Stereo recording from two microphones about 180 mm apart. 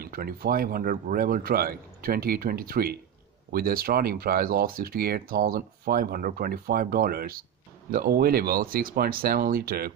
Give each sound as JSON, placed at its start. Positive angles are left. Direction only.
{"t": 0.0, "sound": "speech", "side_deg": -55}